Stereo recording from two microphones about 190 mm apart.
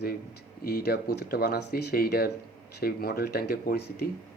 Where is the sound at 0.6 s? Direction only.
55° left (ahead or behind).